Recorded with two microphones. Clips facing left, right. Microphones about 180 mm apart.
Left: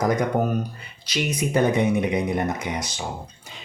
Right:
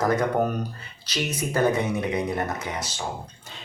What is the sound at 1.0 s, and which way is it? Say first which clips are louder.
Speech: left 3 dB; 15° left (ahead or behind).